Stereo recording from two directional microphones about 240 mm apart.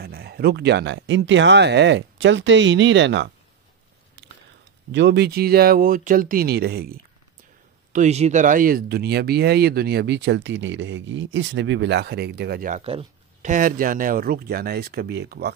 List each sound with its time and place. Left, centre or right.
0.0 s speech: right
4.9 s speech: right
7.9 s speech: right